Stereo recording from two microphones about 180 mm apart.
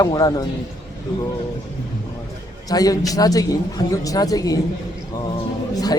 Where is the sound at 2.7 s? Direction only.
20° left (ahead or behind).